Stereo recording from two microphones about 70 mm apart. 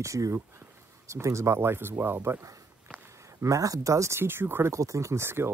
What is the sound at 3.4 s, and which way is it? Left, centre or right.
Speech, right.